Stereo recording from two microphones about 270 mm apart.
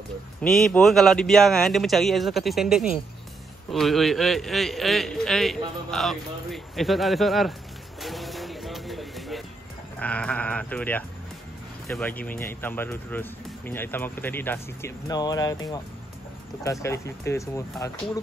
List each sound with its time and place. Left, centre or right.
0.4 s a man's voice: centre
8.0 s vehicle: centre
9.9 s a man's voice: centre
16.8 s speech: centre